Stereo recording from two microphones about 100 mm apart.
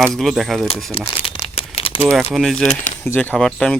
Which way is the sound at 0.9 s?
65° left (ahead or behind).